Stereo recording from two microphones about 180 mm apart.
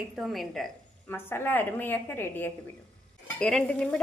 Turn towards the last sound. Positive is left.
turn(degrees=5)  # may be behind; listen again after turning